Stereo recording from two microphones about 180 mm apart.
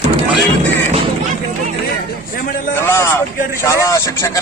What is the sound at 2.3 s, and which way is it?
Speech, 50° left (ahead or behind).